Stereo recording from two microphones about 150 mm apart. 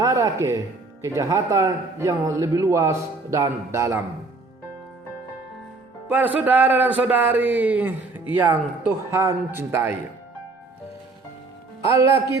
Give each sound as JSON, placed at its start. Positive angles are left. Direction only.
{"t": 0.0, "sound": "music", "side_deg": -25}
{"t": 1.0, "sound": "a man's voice", "side_deg": -20}
{"t": 6.1, "sound": "speech", "side_deg": -10}
{"t": 11.9, "sound": "a man's voice", "side_deg": -20}